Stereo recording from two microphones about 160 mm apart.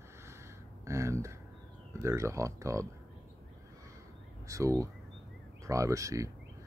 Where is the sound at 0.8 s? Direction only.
20° right (ahead or behind).